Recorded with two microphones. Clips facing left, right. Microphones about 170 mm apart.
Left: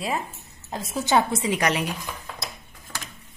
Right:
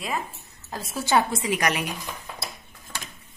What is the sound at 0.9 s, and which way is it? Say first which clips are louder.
Speech: left 1 dB; 20° left (ahead or behind).